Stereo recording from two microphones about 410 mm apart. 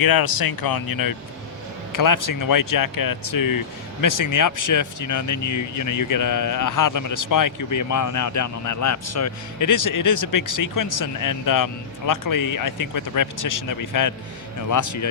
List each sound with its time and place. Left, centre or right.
0.0 s speech: left